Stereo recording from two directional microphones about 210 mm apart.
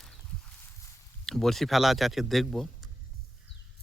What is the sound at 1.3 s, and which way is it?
Speech, centre (ahead or behind).